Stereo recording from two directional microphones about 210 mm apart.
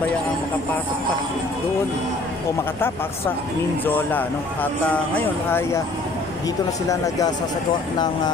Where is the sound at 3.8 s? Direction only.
10° left (ahead or behind).